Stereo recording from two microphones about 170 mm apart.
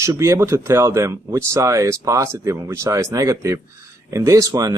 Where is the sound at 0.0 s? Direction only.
15° right (ahead or behind).